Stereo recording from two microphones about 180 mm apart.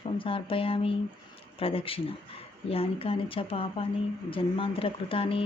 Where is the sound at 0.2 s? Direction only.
30° left (ahead or behind).